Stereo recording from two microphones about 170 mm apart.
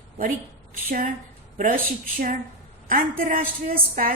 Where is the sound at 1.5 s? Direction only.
55° right (ahead or behind).